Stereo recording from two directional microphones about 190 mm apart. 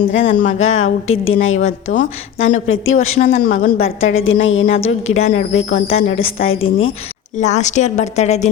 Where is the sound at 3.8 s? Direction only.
90° left.